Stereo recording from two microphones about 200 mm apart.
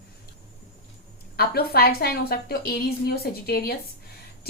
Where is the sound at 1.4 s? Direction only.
50° left (ahead or behind).